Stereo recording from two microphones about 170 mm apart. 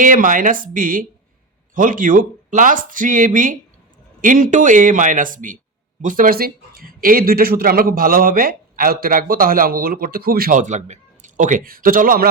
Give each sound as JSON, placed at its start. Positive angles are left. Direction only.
{"t": 0.0, "sound": "a man's voice", "side_deg": -50}